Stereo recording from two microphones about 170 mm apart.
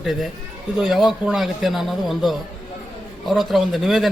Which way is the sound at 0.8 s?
Centre (ahead or behind).